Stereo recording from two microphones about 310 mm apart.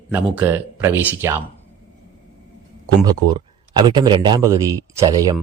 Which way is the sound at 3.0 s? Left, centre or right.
Centre.